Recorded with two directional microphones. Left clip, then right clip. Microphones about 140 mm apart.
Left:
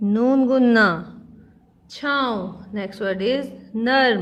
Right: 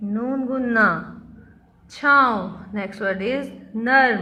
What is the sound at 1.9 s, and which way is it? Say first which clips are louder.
A woman's voice: right 6 dB; 40° left (ahead or behind).